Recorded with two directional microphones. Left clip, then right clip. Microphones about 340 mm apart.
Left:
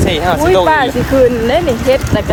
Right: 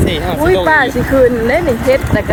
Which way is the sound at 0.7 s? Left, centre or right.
Centre.